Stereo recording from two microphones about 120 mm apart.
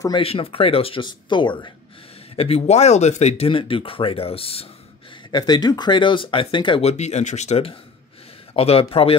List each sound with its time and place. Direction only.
0.1 s speech: 55° left (ahead or behind)
2.3 s speech: 55° left (ahead or behind)
5.3 s speech: 35° left (ahead or behind)
6.9 s speech: 70° left (ahead or behind)